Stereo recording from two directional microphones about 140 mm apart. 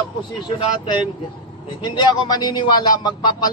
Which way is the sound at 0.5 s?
35° left (ahead or behind).